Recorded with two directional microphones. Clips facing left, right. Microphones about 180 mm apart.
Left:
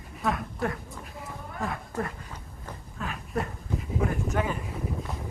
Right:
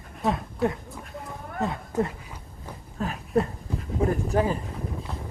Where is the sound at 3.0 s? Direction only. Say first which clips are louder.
Right 7 dB; 35° right (ahead or behind).